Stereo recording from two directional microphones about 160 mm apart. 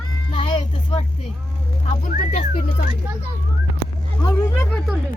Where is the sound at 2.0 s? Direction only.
50° left (ahead or behind).